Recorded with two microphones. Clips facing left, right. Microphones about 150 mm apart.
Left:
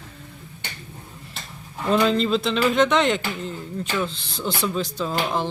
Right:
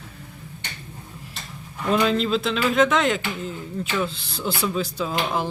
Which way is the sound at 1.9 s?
Centre (ahead or behind).